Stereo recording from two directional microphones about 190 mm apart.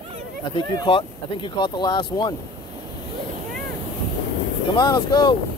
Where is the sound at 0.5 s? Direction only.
25° left (ahead or behind).